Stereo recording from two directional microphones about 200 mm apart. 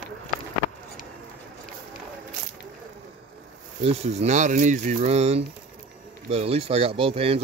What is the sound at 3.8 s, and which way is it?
Speech, 30° right (ahead or behind).